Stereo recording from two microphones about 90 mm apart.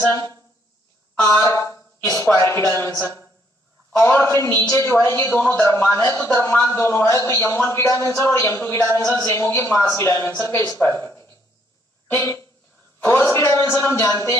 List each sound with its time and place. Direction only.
1.2 s a woman's voice: 35° left (ahead or behind)
13.3 s music: 30° left (ahead or behind)